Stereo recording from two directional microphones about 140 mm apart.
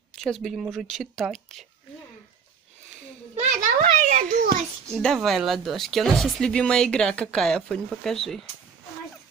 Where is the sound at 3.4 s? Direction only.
60° right (ahead or behind); by 4.5 s 80° right.